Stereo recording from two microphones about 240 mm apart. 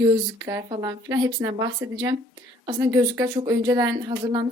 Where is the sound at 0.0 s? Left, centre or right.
Centre.